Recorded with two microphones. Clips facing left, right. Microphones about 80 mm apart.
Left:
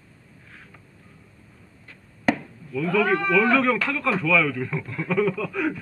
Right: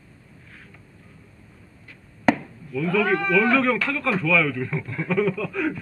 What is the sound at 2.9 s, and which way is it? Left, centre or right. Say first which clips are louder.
Speech: even; left.